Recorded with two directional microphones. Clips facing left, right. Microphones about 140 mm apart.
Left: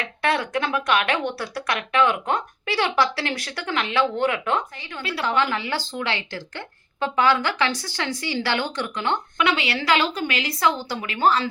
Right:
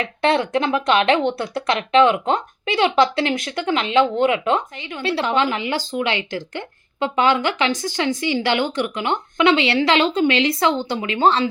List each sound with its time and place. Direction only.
0.0 s speech: 25° right (ahead or behind)